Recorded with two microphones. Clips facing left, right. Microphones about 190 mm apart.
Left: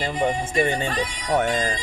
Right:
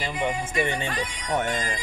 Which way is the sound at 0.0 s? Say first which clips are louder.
Left 4 dB; 35° left (ahead or behind).